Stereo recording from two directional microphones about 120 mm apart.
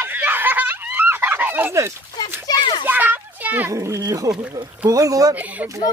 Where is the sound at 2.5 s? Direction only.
35° left (ahead or behind).